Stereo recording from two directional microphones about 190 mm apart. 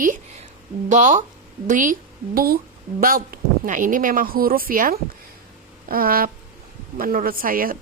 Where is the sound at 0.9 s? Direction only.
40° right (ahead or behind).